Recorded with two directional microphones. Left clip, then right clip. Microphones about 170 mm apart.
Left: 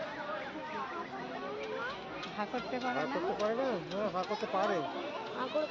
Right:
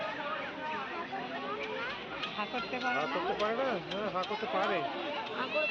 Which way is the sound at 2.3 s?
30° left (ahead or behind).